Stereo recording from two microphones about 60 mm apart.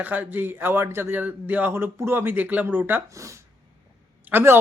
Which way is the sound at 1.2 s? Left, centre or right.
Right.